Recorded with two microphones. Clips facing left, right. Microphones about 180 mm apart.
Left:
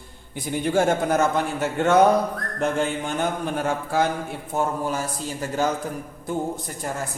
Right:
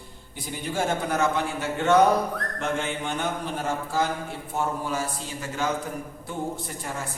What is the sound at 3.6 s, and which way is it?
Speech, 60° left (ahead or behind).